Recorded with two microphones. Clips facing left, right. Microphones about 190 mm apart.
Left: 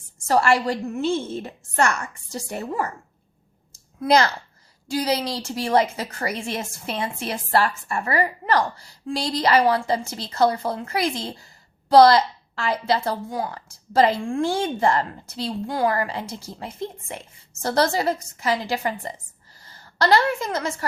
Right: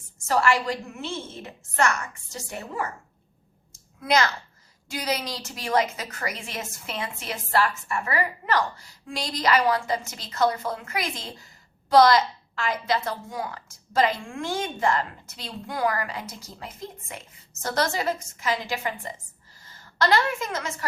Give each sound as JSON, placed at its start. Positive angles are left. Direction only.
{"t": 0.3, "sound": "a woman's voice", "side_deg": 30}
{"t": 3.7, "sound": "a sound", "side_deg": 35}
{"t": 4.9, "sound": "a woman's voice", "side_deg": 30}